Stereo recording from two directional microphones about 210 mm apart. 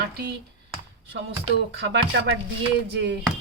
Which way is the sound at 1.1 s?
60° right (ahead or behind).